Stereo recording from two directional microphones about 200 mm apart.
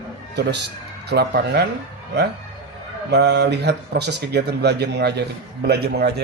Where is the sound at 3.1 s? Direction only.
60° right (ahead or behind).